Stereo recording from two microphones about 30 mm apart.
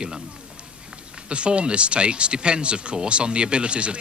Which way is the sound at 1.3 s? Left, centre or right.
Right.